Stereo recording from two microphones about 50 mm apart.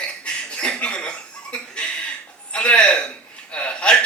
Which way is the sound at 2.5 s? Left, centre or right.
Left.